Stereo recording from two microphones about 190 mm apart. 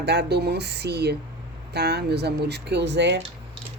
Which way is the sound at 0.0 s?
60° right (ahead or behind).